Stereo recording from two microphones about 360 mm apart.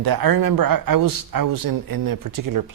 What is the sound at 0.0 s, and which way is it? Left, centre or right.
Speech, right.